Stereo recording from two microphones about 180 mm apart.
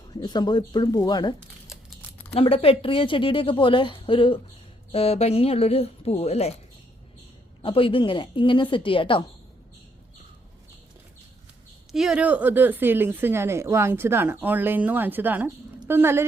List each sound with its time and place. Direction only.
0.1 s a woman's voice: 25° left (ahead or behind)
7.6 s a woman's voice: 30° left (ahead or behind)
11.9 s a woman's voice: 5° right (ahead or behind)